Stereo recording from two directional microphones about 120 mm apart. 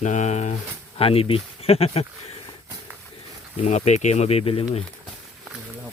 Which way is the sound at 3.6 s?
75° left (ahead or behind).